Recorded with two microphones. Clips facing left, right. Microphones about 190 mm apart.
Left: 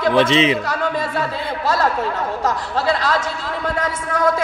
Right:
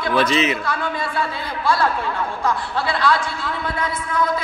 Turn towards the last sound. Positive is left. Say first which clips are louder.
# left 3 dB
turn(degrees=40)  # may be behind; listen again after turning